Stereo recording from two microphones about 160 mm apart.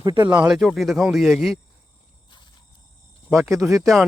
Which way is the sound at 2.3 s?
30° left (ahead or behind).